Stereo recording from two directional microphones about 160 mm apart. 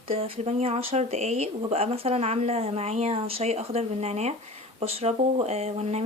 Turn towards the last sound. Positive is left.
turn(degrees=-40)  # may be behind; listen again after turning